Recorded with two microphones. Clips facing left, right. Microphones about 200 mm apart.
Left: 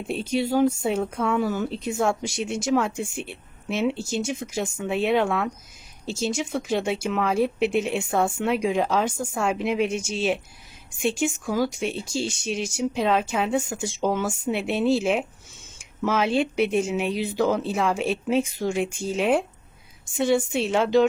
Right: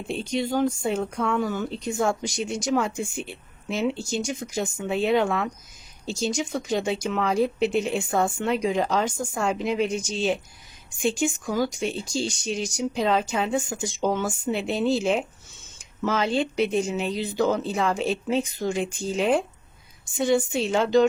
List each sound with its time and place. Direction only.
0.1 s speech: 5° left (ahead or behind)